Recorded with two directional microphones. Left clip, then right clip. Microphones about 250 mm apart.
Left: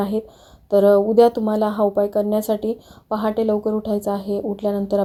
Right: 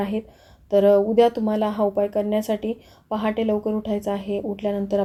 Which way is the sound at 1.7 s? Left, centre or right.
Left.